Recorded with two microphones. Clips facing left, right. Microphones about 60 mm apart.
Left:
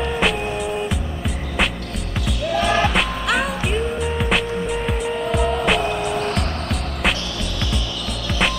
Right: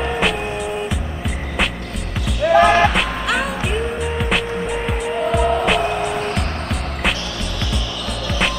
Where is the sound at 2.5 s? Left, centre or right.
Right.